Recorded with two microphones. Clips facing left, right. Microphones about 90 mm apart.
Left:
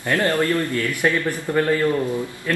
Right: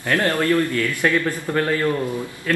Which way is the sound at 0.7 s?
15° left (ahead or behind).